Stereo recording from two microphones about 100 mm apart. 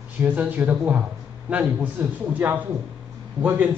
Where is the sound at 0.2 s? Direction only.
15° right (ahead or behind).